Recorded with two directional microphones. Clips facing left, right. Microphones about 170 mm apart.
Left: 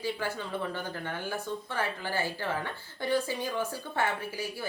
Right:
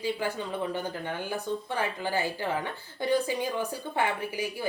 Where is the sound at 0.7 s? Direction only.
15° right (ahead or behind).